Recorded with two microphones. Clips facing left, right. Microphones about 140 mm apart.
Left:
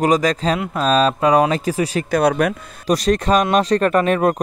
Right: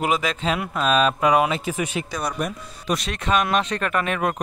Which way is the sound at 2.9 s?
40° left (ahead or behind).